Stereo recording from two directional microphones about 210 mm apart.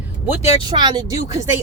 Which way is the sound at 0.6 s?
20° right (ahead or behind).